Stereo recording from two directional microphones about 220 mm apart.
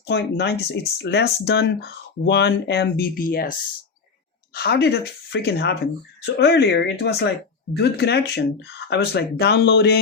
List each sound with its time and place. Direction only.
0.1 s speech: 50° left (ahead or behind)
4.5 s speech: 45° left (ahead or behind)